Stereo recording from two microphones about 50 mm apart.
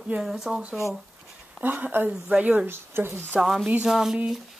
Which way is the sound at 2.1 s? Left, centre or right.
Centre.